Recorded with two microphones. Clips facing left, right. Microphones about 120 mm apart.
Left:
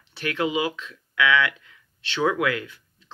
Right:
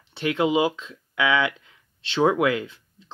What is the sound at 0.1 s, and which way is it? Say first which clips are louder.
Speech: right 4 dB; 25° right (ahead or behind).